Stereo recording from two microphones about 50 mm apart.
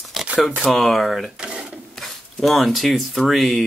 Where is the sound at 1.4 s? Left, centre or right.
Right.